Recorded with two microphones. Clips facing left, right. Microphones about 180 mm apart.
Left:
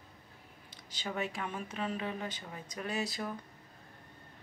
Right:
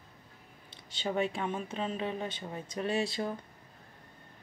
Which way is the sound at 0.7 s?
25° right (ahead or behind).